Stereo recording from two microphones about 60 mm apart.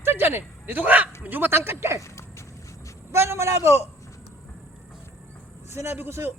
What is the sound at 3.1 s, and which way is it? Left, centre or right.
Speech, right.